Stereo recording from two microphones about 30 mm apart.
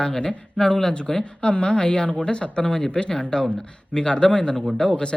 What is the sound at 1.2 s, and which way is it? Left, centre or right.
Speech, left.